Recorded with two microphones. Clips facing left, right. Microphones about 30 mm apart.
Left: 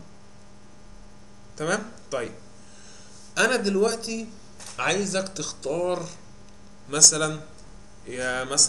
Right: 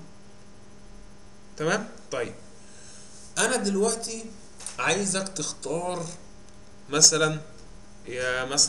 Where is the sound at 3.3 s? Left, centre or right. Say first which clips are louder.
Left 3 dB; centre.